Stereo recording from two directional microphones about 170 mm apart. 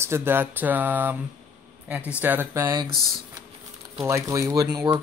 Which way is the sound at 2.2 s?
10° right (ahead or behind).